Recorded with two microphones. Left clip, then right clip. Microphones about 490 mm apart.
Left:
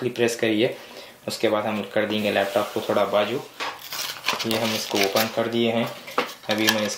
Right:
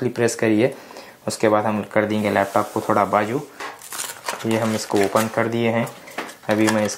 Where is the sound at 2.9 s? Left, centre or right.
Right.